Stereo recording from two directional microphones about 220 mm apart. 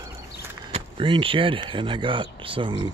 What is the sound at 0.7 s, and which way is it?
Speech, 25° right (ahead or behind).